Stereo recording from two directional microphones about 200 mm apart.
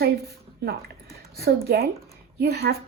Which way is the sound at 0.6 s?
50° right (ahead or behind).